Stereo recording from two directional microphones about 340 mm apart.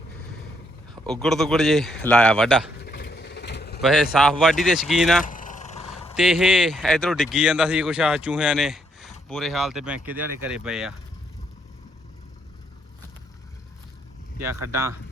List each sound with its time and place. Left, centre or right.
1.0 s speech: centre
2.8 s vehicle: left
3.8 s speech: centre
5.2 s vehicle: left
5.9 s speech: centre
14.7 s speech: centre